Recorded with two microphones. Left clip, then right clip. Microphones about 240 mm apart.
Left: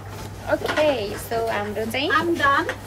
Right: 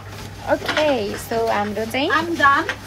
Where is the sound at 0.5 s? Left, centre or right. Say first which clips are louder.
Right 2 dB; centre.